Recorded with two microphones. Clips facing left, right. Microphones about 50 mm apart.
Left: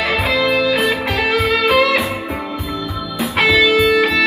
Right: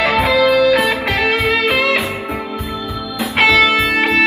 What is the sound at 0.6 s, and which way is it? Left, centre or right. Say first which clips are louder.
Music: right 3 dB; right.